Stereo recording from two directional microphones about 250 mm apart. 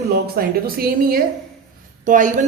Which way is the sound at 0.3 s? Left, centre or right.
Right.